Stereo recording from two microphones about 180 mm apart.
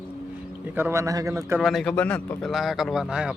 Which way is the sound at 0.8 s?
15° right (ahead or behind).